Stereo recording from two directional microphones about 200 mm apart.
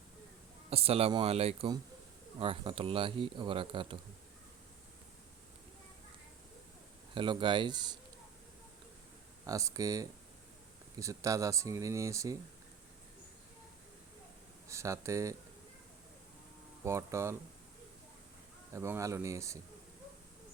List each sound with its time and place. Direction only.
0.7 s speech: 30° right (ahead or behind)
7.1 s speech: 25° right (ahead or behind)
9.5 s speech: 15° right (ahead or behind)
14.7 s speech: 15° right (ahead or behind)
16.8 s speech: 15° right (ahead or behind)
18.7 s speech: 15° right (ahead or behind)